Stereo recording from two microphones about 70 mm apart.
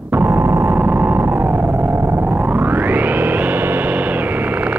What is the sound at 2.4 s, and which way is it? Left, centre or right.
Music, right.